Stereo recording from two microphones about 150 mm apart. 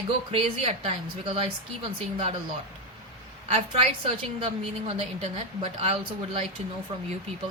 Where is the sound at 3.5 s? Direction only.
40° right (ahead or behind).